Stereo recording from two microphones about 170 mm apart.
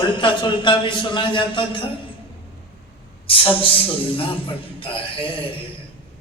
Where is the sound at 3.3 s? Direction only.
30° left (ahead or behind).